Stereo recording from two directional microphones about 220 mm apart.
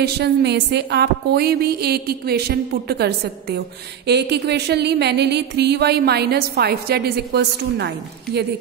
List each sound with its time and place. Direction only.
0.0 s music: 50° right (ahead or behind)